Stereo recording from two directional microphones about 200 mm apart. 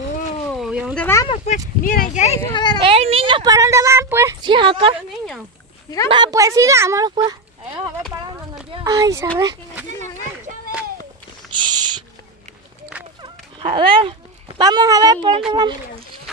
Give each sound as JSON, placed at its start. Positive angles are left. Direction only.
{"t": 0.5, "sound": "a sound", "side_deg": -5}
{"t": 0.9, "sound": "speech", "side_deg": 10}
{"t": 1.2, "sound": "speech", "side_deg": 25}
{"t": 1.8, "sound": "speech", "side_deg": 45}
{"t": 2.5, "sound": "a child's voice", "side_deg": 20}
{"t": 2.8, "sound": "a woman's voice", "side_deg": -30}
{"t": 6.0, "sound": "speech", "side_deg": -20}
{"t": 7.2, "sound": "a sound", "side_deg": -25}
{"t": 8.8, "sound": "speech", "side_deg": -15}
{"t": 11.5, "sound": "owl", "side_deg": -20}
{"t": 13.2, "sound": "dog", "side_deg": -25}
{"t": 14.6, "sound": "speech", "side_deg": -20}